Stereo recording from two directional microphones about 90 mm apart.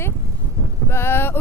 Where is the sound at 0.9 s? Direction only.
25° left (ahead or behind).